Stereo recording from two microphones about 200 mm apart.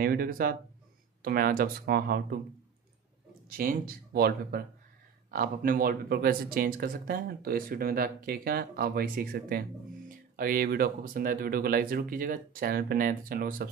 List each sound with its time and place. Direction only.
0.0 s speech: 45° right (ahead or behind)
3.4 s speech: 45° right (ahead or behind)